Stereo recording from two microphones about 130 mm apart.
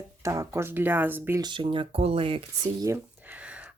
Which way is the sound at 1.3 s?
35° right (ahead or behind).